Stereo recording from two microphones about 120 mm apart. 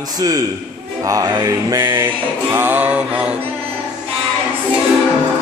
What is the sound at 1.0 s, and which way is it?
Music, 30° right (ahead or behind).